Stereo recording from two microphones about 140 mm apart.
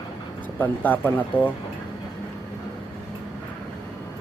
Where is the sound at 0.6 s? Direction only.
10° left (ahead or behind).